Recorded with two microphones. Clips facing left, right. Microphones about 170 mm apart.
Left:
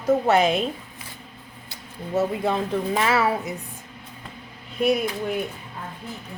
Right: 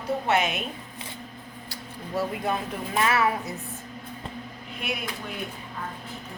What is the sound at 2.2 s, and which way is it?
Speech, 25° left (ahead or behind).